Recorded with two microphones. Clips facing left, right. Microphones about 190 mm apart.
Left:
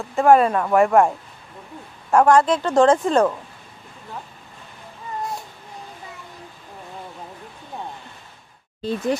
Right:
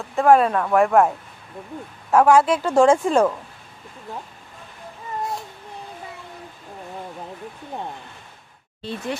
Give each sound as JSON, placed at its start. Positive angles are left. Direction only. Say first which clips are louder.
{"t": 0.0, "sound": "a woman's voice", "louder": "left 1 dB", "side_deg": 0}
{"t": 8.8, "sound": "speech", "louder": "left 6 dB", "side_deg": 40}